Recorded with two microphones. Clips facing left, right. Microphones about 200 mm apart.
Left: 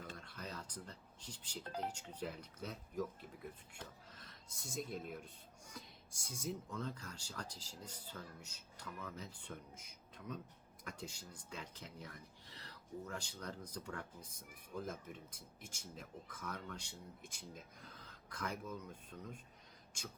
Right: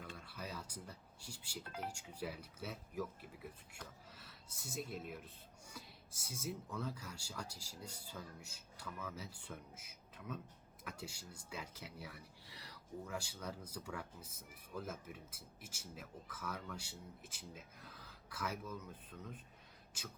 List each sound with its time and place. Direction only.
0.2 s a sound: 5° right (ahead or behind)
1.6 s speech: 35° left (ahead or behind)
1.9 s speech: 10° right (ahead or behind)